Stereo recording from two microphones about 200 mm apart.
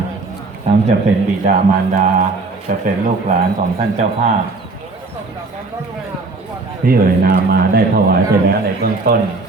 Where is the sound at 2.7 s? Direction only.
45° right (ahead or behind).